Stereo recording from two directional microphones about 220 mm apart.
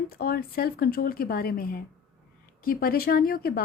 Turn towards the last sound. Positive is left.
turn(degrees=45)  # may be behind; listen again after turning